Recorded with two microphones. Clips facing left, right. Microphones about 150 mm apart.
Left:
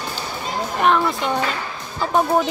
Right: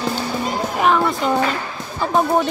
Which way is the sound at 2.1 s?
Centre (ahead or behind).